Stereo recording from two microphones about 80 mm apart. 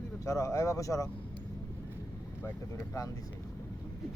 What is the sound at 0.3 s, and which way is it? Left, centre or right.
Speech, left.